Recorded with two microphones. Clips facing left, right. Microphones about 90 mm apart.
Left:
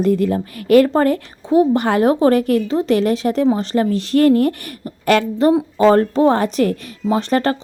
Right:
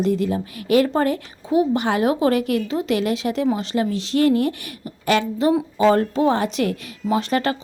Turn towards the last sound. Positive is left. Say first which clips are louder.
# left 4 dB
turn(degrees=35)  # may be behind; listen again after turning